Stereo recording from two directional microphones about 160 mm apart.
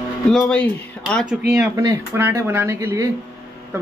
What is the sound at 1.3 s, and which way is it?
Speech, 10° right (ahead or behind).